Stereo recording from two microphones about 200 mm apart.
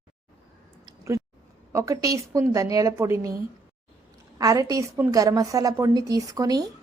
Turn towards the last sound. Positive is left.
turn(degrees=-20)  # may be behind; listen again after turning